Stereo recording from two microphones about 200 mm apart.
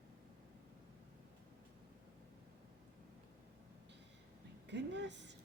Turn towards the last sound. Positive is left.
turn(degrees=-60)  # may be behind; listen again after turning